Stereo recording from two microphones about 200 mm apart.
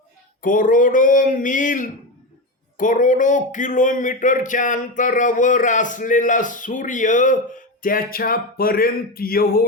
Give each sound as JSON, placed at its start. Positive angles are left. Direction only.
{"t": 0.4, "sound": "a man's voice", "side_deg": 40}